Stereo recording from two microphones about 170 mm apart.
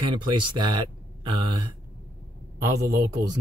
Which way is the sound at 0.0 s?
25° right (ahead or behind).